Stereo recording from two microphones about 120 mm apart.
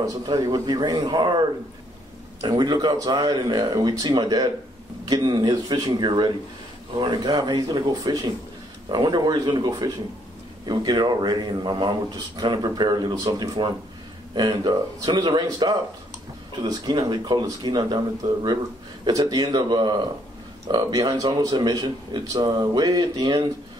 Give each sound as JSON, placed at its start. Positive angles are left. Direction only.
{"t": 0.0, "sound": "a man's voice", "side_deg": -30}
{"t": 2.4, "sound": "a man's voice", "side_deg": -35}